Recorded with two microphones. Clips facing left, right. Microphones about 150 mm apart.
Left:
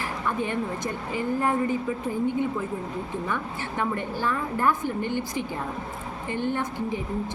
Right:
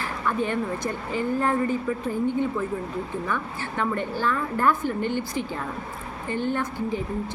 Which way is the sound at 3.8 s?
15° left (ahead or behind).